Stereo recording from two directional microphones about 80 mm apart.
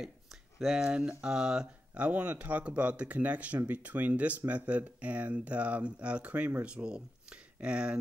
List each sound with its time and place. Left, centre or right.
0.0 s speech: centre